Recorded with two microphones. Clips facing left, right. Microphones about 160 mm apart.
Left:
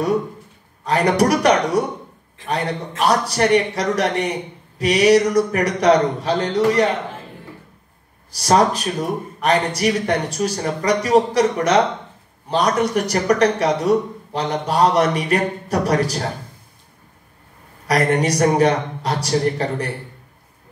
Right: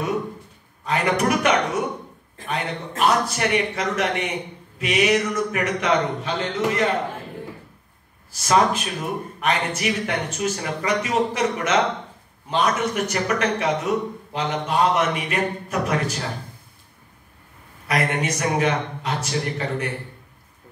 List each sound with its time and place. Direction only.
0.8 s a man's voice: 35° left (ahead or behind)
8.3 s a man's voice: 35° left (ahead or behind)
17.8 s a man's voice: 35° left (ahead or behind)